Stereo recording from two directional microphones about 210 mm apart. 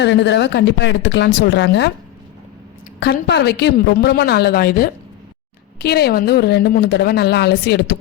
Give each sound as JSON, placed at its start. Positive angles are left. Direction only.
{"t": 0.0, "sound": "speech", "side_deg": 55}
{"t": 3.0, "sound": "a woman's voice", "side_deg": 50}